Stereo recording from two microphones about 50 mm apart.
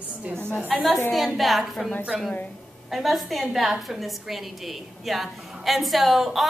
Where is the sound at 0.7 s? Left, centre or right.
Centre.